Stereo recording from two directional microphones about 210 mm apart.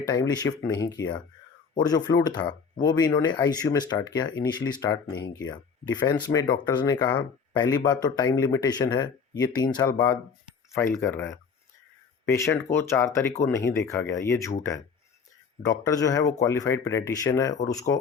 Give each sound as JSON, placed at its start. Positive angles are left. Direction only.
{"t": 0.1, "sound": "speech", "side_deg": 20}
{"t": 15.6, "sound": "speech", "side_deg": 20}